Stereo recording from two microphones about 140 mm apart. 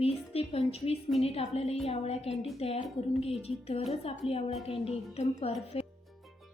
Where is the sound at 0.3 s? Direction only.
45° left (ahead or behind).